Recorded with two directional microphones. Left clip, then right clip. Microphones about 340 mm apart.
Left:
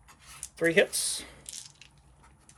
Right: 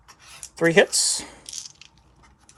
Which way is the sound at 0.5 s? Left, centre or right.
Centre.